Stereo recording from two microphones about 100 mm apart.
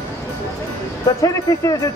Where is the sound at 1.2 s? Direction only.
35° left (ahead or behind).